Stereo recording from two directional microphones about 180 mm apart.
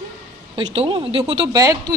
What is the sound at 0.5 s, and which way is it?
Speech, 30° right (ahead or behind).